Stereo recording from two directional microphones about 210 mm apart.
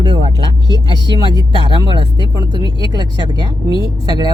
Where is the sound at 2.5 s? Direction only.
20° right (ahead or behind).